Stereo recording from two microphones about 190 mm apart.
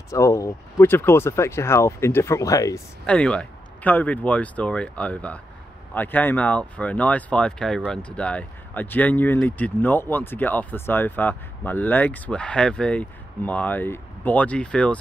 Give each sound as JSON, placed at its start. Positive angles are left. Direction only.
{"t": 0.1, "sound": "speech", "side_deg": 15}
{"t": 3.1, "sound": "speech", "side_deg": 5}